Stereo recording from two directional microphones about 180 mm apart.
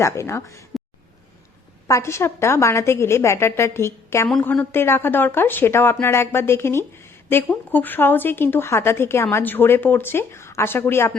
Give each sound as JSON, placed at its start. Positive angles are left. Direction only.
{"t": 0.0, "sound": "speech", "side_deg": 15}
{"t": 1.9, "sound": "speech", "side_deg": 15}
{"t": 4.3, "sound": "speech", "side_deg": 5}